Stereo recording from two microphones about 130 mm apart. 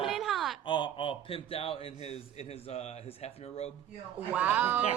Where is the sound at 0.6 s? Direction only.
40° left (ahead or behind).